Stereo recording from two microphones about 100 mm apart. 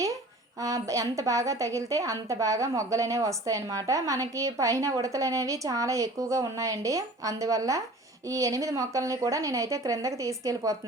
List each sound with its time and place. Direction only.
0.6 s a woman's voice: 35° right (ahead or behind)